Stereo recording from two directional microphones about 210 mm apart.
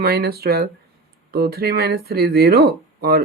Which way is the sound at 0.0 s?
50° right (ahead or behind).